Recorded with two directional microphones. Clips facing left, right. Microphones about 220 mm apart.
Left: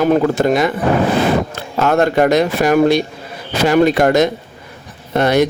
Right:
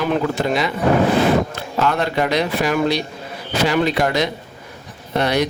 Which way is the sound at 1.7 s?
45° left (ahead or behind).